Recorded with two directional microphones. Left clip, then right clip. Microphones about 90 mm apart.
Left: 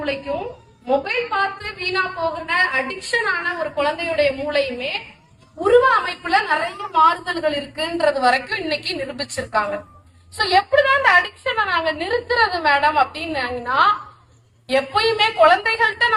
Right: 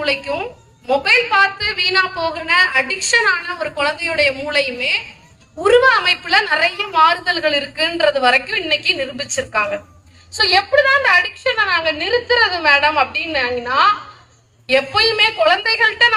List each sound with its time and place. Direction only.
0.0 s a woman's voice: 25° right (ahead or behind)